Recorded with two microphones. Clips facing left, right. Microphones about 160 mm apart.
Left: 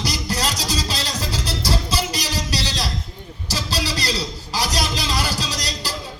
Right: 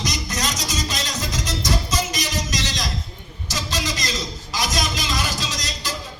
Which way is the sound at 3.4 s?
35° left (ahead or behind).